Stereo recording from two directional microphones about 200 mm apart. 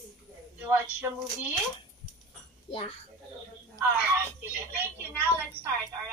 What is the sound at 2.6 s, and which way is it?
Speech, 30° left (ahead or behind).